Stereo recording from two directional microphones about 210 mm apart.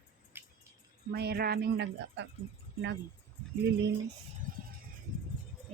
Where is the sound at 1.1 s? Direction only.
50° right (ahead or behind).